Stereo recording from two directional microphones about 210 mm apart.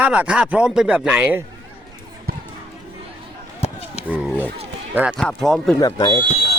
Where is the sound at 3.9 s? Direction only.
5° right (ahead or behind).